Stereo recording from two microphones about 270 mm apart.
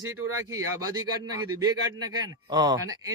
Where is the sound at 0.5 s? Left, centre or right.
Centre.